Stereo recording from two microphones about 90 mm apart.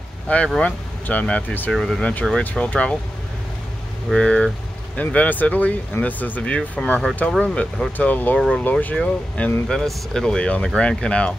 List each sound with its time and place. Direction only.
0.6 s speech: 15° left (ahead or behind)
1.7 s speech: 5° left (ahead or behind)
4.1 s speech: 10° left (ahead or behind)
8.4 s speech: 5° left (ahead or behind)
8.6 s speech: 20° left (ahead or behind)